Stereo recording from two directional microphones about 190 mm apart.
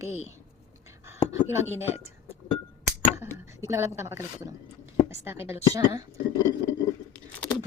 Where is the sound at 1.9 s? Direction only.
35° left (ahead or behind).